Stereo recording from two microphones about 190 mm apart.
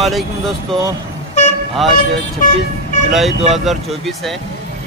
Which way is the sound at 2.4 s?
45° left (ahead or behind).